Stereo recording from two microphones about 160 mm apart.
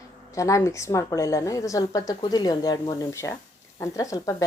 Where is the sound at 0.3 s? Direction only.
20° left (ahead or behind).